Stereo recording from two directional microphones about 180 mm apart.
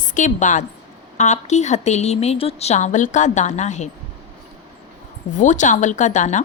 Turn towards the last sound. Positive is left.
turn(degrees=45)  # may be behind; listen again after turning